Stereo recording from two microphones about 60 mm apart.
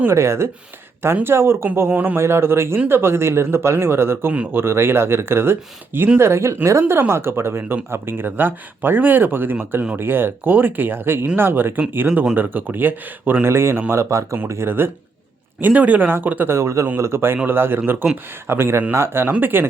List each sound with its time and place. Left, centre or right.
0.1 s speech: right
1.9 s speech: right
2.1 s speech: right
14.4 s speech: right
15.6 s speech: right
16.5 s speech: right